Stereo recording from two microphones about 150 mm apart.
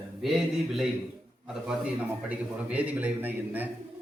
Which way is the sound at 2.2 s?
10° right (ahead or behind).